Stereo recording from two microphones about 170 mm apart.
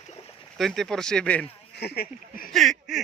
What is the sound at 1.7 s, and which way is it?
Speech, 70° left (ahead or behind).